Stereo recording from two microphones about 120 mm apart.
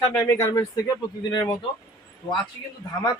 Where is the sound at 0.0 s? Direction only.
25° left (ahead or behind).